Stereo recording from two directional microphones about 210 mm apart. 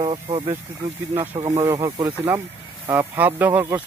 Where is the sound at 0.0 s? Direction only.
25° right (ahead or behind).